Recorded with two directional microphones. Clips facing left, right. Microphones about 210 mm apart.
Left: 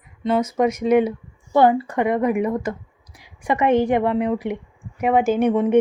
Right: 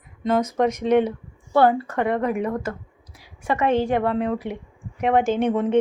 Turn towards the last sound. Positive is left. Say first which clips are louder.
# left 3 dB
turn(degrees=10)  # may be behind; listen again after turning